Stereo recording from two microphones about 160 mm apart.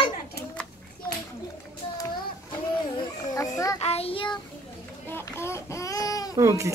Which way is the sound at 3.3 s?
20° left (ahead or behind).